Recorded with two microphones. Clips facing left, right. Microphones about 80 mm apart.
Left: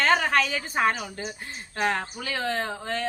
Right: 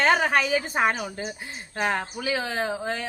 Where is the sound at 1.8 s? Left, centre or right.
Centre.